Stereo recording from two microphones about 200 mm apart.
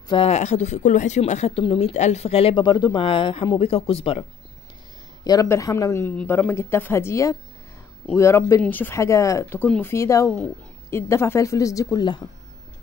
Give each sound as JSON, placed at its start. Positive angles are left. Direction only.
{"t": 0.1, "sound": "speech", "side_deg": 30}
{"t": 5.2, "sound": "speech", "side_deg": 20}